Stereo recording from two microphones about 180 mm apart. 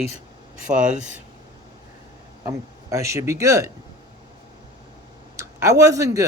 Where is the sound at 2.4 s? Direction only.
15° right (ahead or behind).